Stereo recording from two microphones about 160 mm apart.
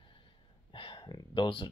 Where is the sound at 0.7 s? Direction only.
35° left (ahead or behind).